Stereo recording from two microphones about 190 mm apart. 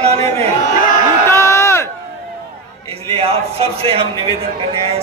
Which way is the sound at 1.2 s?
15° left (ahead or behind).